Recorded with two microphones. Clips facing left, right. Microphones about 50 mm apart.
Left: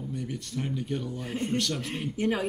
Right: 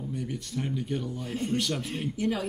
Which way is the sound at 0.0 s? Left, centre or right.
Centre.